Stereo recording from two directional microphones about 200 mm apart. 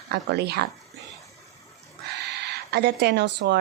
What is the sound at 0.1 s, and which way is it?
Speech, 55° right (ahead or behind).